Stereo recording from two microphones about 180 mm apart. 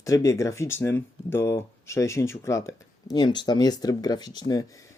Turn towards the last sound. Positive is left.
turn(degrees=20)  # may be behind; listen again after turning